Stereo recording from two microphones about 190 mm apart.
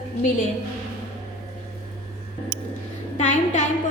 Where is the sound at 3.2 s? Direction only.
40° left (ahead or behind).